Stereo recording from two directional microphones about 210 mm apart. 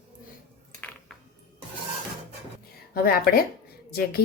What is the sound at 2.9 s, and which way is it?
A woman's voice, 45° left (ahead or behind).